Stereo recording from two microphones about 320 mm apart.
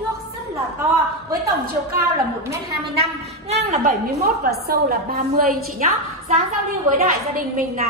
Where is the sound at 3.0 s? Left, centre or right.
Centre.